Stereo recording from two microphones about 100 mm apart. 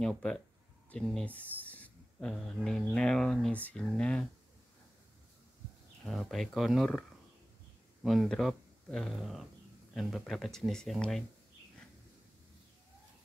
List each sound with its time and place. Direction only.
0.9 s speech: 10° left (ahead or behind)
6.0 s speech: centre (ahead or behind)
8.0 s speech: centre (ahead or behind)